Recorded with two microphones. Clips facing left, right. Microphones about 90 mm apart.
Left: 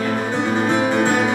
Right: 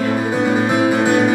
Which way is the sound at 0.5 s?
10° right (ahead or behind).